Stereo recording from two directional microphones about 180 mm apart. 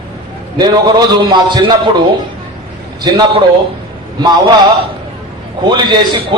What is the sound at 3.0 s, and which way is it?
Speech, 25° right (ahead or behind).